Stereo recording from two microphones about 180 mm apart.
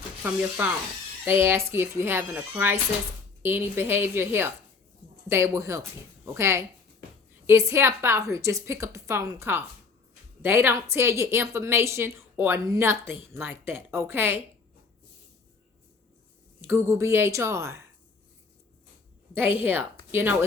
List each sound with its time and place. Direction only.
0.2 s a woman's voice: 10° right (ahead or behind)
16.6 s a woman's voice: 15° right (ahead or behind)
19.5 s speech: 10° right (ahead or behind)